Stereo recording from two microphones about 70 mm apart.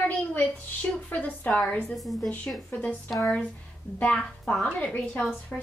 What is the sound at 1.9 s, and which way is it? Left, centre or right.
Speech, centre.